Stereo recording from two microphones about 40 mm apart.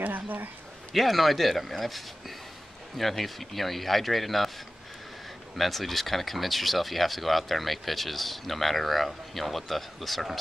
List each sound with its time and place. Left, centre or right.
0.0 s speech: right
0.9 s speech: centre
5.6 s speech: centre